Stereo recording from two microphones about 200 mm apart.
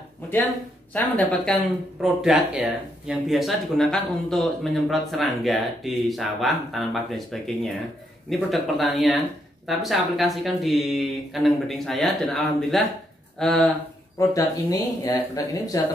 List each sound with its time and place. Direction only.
0.9 s speech: 5° left (ahead or behind)
14.1 s speech: 15° left (ahead or behind)